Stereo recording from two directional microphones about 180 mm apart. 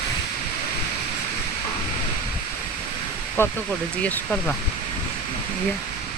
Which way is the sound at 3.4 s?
15° left (ahead or behind).